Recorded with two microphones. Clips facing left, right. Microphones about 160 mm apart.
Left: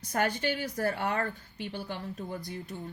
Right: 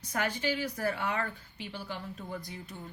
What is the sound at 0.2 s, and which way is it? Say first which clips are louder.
A woman's voice: left 2 dB; 55° left (ahead or behind).